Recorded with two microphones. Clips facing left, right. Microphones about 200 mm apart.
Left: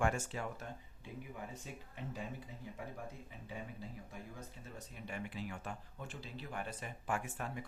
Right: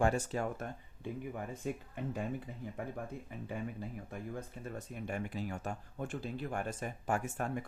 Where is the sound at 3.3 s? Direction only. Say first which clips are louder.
Right 7 dB; 55° right (ahead or behind).